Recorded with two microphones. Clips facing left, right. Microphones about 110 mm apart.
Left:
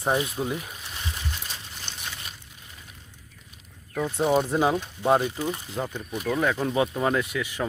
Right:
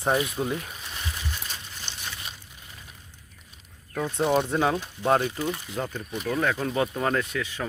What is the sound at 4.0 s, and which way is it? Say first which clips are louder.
Speech: left 1 dB; centre (ahead or behind).